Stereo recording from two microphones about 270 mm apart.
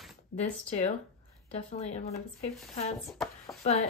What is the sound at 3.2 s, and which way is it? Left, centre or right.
Speech, centre.